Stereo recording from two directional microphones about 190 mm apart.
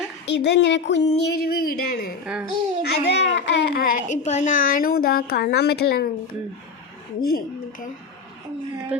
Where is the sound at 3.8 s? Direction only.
40° left (ahead or behind); by 6.1 s 55° left (ahead or behind).